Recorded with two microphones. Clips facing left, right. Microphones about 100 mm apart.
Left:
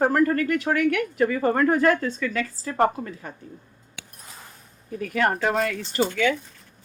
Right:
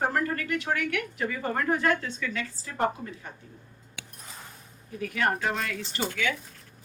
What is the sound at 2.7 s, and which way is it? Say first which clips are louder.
Speech: left 6 dB; 60° left (ahead or behind).